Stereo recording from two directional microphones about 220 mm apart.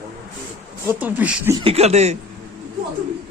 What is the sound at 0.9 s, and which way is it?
Speech, 10° right (ahead or behind).